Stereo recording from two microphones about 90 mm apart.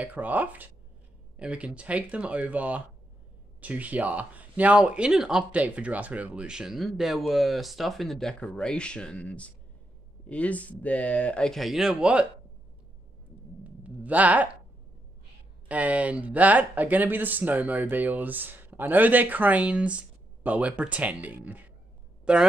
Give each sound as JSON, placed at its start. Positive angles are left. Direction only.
{"t": 0.0, "sound": "speech", "side_deg": -15}
{"t": 13.7, "sound": "a sound", "side_deg": -15}
{"t": 15.7, "sound": "speech", "side_deg": -15}